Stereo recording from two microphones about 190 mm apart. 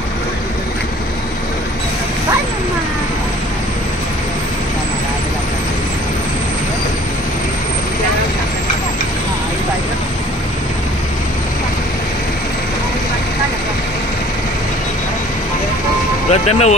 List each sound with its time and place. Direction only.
16.3 s speech: 35° left (ahead or behind)